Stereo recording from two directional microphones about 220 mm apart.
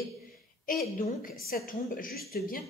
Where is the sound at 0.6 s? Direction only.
40° left (ahead or behind).